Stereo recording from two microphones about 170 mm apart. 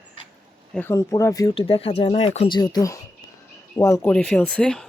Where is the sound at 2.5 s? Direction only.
25° left (ahead or behind).